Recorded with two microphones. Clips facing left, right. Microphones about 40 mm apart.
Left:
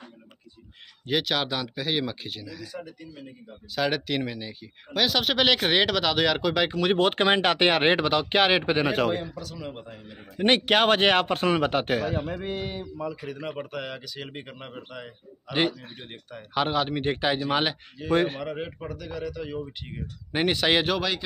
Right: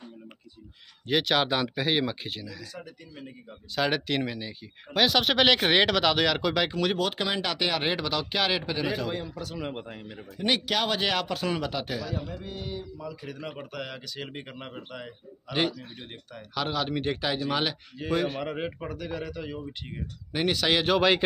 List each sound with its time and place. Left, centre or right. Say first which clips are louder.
1.0 s speech: right 1 dB; centre
3.2 s speech: even; centre
7.0 s speech: left 7 dB; left
9.3 s speech: right 1 dB; centre
9.6 s speech: right 2 dB; right
10.3 s speech: left 6 dB; left
12.7 s speech: left 4 dB; left
13.2 s speech: left 4 dB; centre
15.5 s speech: left 2 dB; centre
18.1 s speech: left 4 dB; left
18.4 s speech: right 1 dB; centre
19.5 s speech: left 3 dB; centre
20.3 s speech: left 2 dB; centre